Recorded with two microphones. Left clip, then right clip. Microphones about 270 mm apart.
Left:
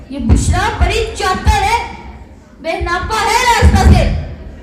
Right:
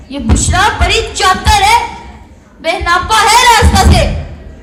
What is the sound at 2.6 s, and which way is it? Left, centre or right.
A woman's voice, right.